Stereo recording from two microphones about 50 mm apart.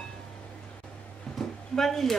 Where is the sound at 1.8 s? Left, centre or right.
Centre.